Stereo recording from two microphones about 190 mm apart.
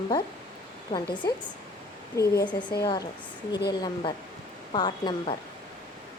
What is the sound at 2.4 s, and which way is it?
A woman's voice, 25° left (ahead or behind).